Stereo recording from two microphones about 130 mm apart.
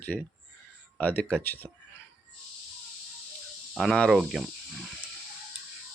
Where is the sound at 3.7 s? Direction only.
Centre (ahead or behind).